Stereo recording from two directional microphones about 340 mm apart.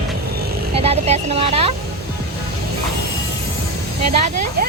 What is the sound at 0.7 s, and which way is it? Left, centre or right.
Speech, centre.